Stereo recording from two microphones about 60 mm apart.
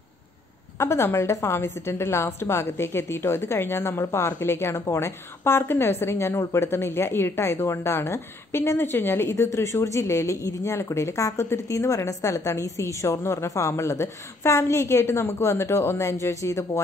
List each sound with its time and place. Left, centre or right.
0.7 s a woman's voice: left